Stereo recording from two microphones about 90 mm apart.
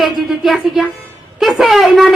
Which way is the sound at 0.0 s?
Centre (ahead or behind).